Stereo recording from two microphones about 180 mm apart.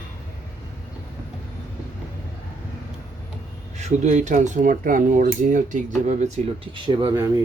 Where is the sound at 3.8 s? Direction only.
40° right (ahead or behind).